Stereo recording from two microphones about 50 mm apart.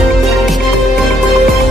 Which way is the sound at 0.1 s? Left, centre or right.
Centre.